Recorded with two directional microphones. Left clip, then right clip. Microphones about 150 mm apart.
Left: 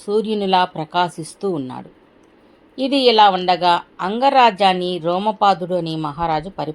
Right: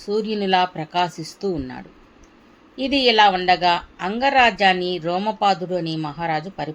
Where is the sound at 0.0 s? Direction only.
30° left (ahead or behind).